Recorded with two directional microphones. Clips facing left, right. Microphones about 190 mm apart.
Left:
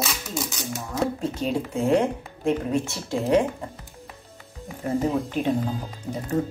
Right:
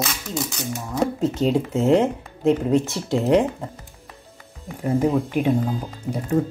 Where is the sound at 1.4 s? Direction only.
20° right (ahead or behind).